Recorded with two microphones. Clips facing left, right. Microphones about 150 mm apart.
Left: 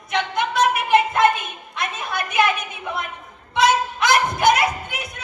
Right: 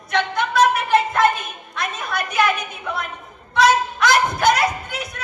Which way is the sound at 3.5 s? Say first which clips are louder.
Right 2 dB; 25° left (ahead or behind).